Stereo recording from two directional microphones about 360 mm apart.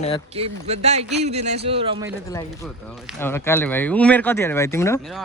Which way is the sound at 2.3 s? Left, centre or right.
Centre.